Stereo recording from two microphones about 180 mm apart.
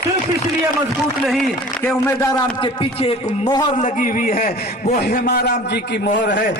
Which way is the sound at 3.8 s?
45° left (ahead or behind).